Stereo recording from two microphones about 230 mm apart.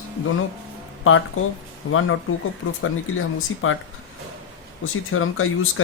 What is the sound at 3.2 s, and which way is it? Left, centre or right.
Speech, left.